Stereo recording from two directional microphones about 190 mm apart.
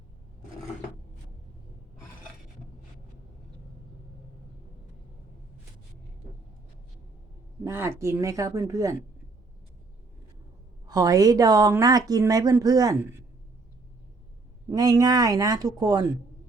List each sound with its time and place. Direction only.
7.6 s speech: 15° right (ahead or behind)
10.8 s speech: 20° right (ahead or behind)
14.7 s speech: 20° right (ahead or behind)